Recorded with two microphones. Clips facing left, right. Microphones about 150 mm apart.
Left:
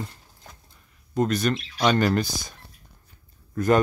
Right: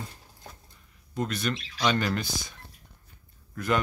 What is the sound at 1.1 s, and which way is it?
Speech, 45° left (ahead or behind).